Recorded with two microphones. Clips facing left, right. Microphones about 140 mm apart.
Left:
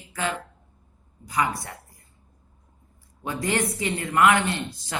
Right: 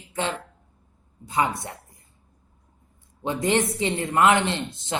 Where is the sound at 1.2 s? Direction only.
25° right (ahead or behind).